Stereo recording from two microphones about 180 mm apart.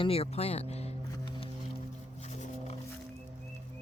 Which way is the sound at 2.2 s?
40° left (ahead or behind).